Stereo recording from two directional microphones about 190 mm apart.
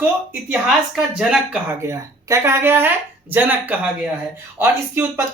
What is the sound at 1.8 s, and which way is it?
Speech, 15° right (ahead or behind).